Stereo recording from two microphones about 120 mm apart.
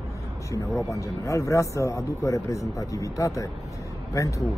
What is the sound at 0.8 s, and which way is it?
Speech, 25° left (ahead or behind).